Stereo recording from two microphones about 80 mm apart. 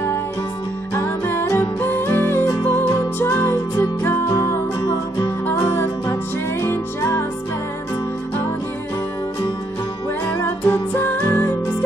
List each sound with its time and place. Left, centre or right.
0.9 s music: left
10.6 s music: left